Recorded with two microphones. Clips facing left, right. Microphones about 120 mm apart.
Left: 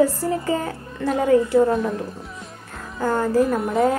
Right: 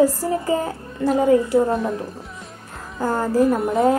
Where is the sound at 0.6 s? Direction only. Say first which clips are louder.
Right 3 dB; 30° right (ahead or behind).